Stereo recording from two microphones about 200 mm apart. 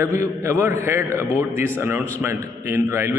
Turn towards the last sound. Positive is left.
turn(degrees=-15)  # may be behind; listen again after turning